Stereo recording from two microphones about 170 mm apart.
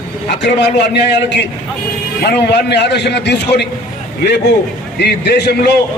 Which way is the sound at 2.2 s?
75° left (ahead or behind).